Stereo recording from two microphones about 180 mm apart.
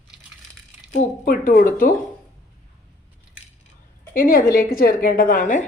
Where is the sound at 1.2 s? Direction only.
55° left (ahead or behind).